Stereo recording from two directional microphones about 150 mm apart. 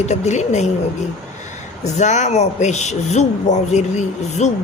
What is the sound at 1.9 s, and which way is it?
A woman's voice, 50° left (ahead or behind).